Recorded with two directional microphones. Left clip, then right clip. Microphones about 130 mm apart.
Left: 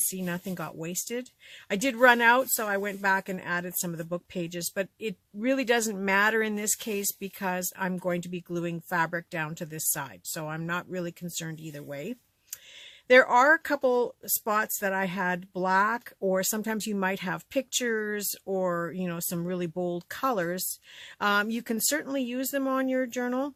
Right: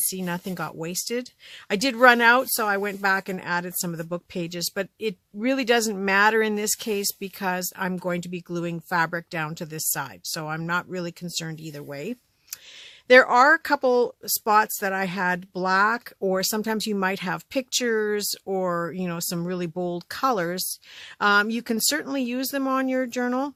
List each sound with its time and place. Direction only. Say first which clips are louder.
0.1 s speech: right 4 dB; 50° right (ahead or behind)